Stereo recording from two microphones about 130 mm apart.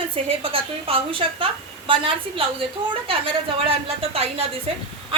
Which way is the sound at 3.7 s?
50° right (ahead or behind).